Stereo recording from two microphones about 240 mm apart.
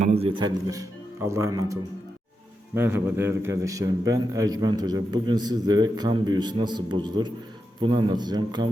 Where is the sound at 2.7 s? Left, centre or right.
Centre.